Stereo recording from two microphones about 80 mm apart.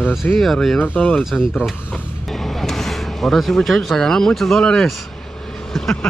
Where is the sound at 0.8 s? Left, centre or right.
Centre.